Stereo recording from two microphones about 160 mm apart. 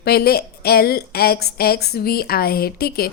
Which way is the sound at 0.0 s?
75° left (ahead or behind).